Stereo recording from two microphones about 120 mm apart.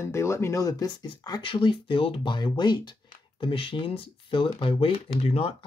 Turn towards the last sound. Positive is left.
turn(degrees=55)  # may be behind; listen again after turning